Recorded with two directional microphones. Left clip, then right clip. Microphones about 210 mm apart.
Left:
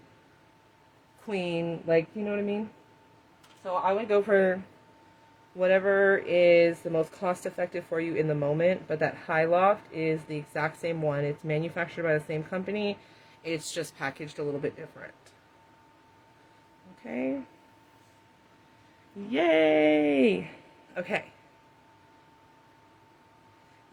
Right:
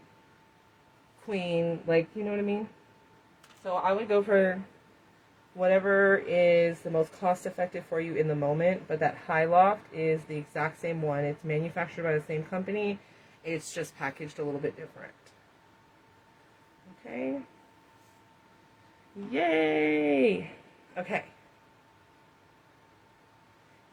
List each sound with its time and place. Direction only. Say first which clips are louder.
1.3 s speech: right 1 dB; 45° left (ahead or behind)
3.6 s speech: left 1 dB; 35° left (ahead or behind)
5.5 s speech: left 1 dB; 50° left (ahead or behind)
17.0 s speech: left 2 dB; 50° left (ahead or behind)
19.3 s speech: left 4 dB; 40° left (ahead or behind)